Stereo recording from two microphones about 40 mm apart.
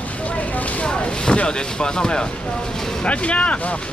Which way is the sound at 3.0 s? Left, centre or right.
Left.